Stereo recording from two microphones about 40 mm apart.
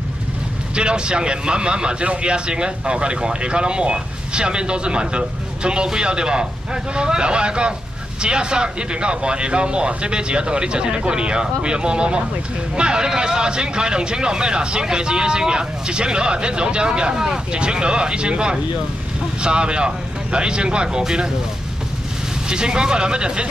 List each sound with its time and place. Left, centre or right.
0.7 s a man's voice: right
22.5 s a man's voice: right